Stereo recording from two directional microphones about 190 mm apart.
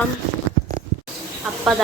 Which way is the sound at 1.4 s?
5° right (ahead or behind).